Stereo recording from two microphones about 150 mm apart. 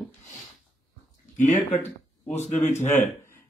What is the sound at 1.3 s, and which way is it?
Speech, 55° left (ahead or behind).